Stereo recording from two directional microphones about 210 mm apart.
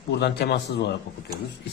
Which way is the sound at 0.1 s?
50° left (ahead or behind).